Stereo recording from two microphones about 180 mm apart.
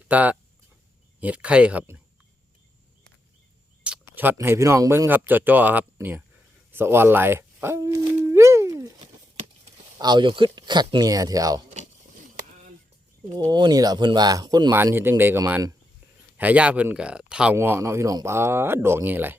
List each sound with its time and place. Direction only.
0.1 s speech: 10° right (ahead or behind)
3.8 s speech: 10° right (ahead or behind)
8.3 s a sound: 15° right (ahead or behind)
10.0 s speech: 25° right (ahead or behind)
13.4 s speech: 20° right (ahead or behind)